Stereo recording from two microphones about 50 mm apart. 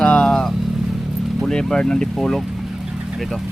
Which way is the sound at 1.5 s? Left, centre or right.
Centre.